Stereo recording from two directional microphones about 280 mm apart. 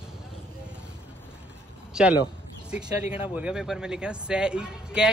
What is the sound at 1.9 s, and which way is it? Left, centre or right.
A man's voice, centre.